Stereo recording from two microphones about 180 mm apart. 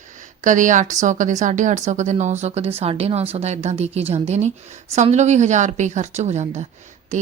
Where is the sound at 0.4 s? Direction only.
45° right (ahead or behind).